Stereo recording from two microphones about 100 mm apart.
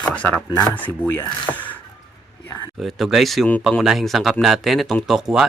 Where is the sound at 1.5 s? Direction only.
15° left (ahead or behind).